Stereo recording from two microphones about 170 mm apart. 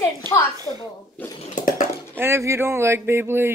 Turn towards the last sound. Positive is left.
turn(degrees=-15)  # may be behind; listen again after turning